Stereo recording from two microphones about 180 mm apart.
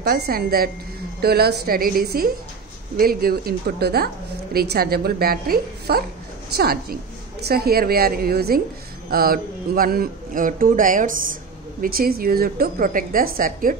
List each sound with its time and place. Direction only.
0.0 s a woman's voice: 55° right (ahead or behind)